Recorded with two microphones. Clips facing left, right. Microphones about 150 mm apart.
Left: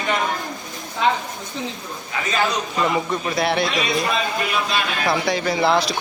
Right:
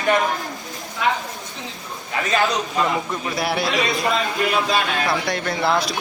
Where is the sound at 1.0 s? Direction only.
25° left (ahead or behind).